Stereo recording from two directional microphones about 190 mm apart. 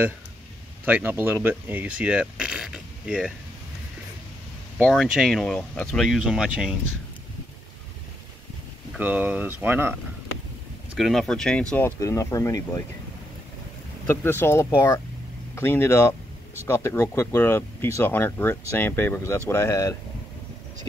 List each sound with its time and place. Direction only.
0.8 s speech: 10° right (ahead or behind)
4.8 s speech: centre (ahead or behind)
8.9 s speech: 10° right (ahead or behind)
11.0 s speech: centre (ahead or behind)
11.7 s speech: 15° left (ahead or behind)
14.0 s speech: 10° left (ahead or behind)